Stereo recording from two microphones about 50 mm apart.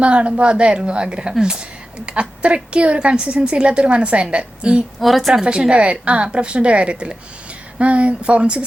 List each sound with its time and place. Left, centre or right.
0.0 s a woman's voice: right
4.9 s a woman's voice: centre
5.3 s a woman's voice: centre